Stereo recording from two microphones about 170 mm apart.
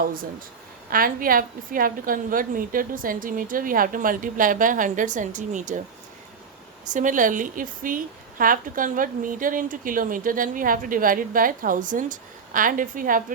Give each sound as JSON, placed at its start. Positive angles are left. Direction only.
{"t": 0.0, "sound": "a woman's voice", "side_deg": -55}
{"t": 6.9, "sound": "a woman's voice", "side_deg": -50}